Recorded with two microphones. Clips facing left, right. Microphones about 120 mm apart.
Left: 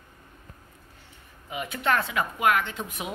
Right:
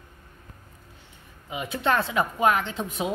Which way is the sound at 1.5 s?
25° right (ahead or behind).